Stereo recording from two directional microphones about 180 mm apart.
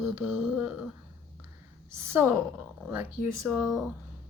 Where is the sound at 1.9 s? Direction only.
15° right (ahead or behind).